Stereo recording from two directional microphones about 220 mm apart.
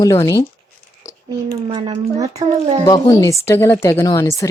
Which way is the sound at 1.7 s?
25° right (ahead or behind).